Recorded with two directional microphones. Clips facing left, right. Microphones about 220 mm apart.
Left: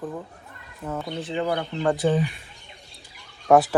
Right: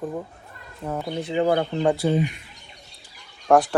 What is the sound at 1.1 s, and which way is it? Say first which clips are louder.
Speech: right 5 dB; 25° right (ahead or behind).